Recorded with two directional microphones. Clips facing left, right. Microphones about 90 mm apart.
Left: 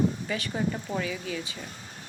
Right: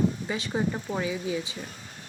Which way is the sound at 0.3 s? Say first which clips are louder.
Right 1 dB; 20° right (ahead or behind).